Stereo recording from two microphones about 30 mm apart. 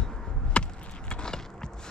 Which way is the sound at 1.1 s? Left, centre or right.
Left.